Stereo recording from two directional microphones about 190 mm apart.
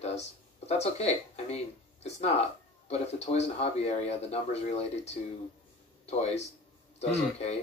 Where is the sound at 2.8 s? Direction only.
35° left (ahead or behind).